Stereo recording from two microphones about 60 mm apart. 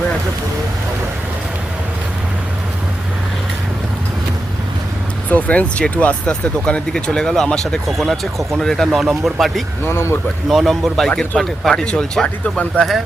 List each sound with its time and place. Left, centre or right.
5.3 s speech: left
7.9 s speech: centre
8.9 s speech: centre
9.8 s speech: left
10.5 s speech: centre
11.7 s speech: centre